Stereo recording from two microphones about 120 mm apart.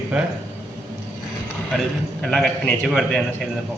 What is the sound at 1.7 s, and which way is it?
A man's voice, 5° left (ahead or behind).